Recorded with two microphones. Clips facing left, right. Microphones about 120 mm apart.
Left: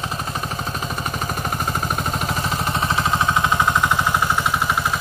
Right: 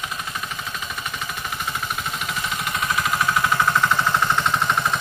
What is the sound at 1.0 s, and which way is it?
Vehicle, 40° left (ahead or behind).